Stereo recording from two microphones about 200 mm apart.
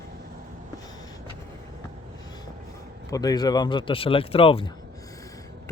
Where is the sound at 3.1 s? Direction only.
20° left (ahead or behind).